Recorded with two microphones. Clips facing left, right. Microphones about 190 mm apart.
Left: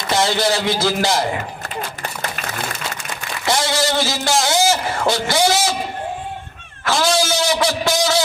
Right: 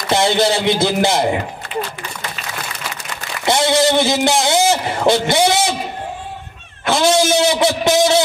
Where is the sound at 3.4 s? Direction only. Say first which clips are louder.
Right 5 dB; 20° right (ahead or behind).